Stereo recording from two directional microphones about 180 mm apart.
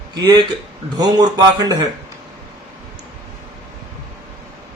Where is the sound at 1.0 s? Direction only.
20° right (ahead or behind).